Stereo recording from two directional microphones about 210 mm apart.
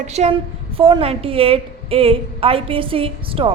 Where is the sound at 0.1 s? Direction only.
30° right (ahead or behind).